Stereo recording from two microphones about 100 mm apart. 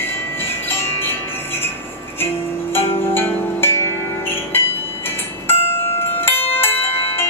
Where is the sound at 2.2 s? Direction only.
20° left (ahead or behind).